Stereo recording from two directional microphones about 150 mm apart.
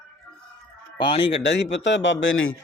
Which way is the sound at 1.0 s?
35° left (ahead or behind).